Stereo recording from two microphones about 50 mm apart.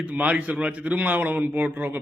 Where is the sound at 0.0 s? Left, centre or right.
Right.